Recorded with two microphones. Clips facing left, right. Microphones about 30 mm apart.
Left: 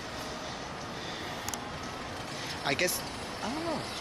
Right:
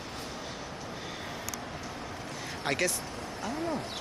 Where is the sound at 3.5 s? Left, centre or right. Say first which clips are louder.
Right 1 dB; left.